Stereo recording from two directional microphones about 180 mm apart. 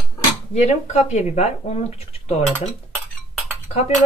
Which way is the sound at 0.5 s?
40° left (ahead or behind).